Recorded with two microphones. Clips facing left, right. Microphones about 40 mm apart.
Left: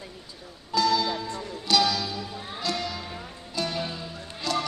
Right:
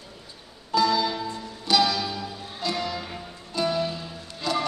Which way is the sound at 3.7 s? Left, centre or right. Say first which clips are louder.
Right 4 dB; centre.